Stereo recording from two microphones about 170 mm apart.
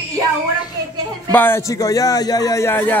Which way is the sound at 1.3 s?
10° left (ahead or behind).